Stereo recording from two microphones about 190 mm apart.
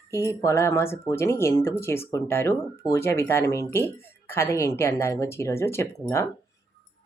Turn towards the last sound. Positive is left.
turn(degrees=15)  # may be behind; listen again after turning